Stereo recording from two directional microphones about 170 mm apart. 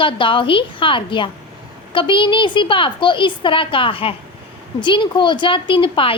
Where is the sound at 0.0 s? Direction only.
30° left (ahead or behind).